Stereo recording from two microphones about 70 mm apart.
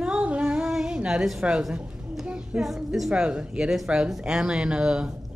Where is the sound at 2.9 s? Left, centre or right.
Centre.